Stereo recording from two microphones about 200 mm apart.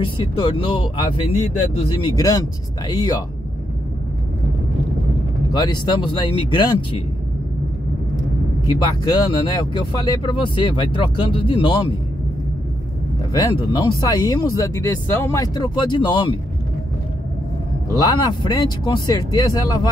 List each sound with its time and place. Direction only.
0.0 s speech: 25° left (ahead or behind)
5.5 s speech: 20° left (ahead or behind)
8.6 s speech: 20° left (ahead or behind)
13.3 s speech: 20° left (ahead or behind)
17.9 s speech: 20° left (ahead or behind)